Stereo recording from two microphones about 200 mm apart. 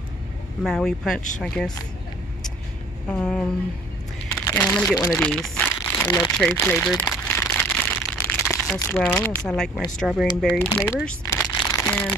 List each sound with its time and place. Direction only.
0.7 s speech: centre (ahead or behind)
3.1 s speech: 5° left (ahead or behind)
4.5 s speech: 5° left (ahead or behind)
4.9 s speech: 20° left (ahead or behind)
5.2 s crumpling: 5° left (ahead or behind)
6.0 s speech: 15° left (ahead or behind)
6.3 s crumpling: 5° left (ahead or behind)
9.9 s speech: centre (ahead or behind)
11.1 s a sound: 10° left (ahead or behind)